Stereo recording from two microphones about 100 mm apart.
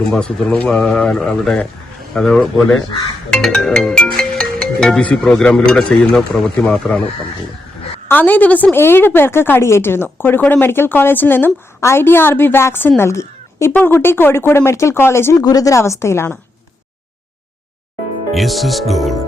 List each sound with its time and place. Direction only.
0.1 s speech: 10° left (ahead or behind)
8.0 s a woman's voice: 20° left (ahead or behind)
15.4 s a woman's voice: 40° left (ahead or behind)
18.3 s speech: centre (ahead or behind)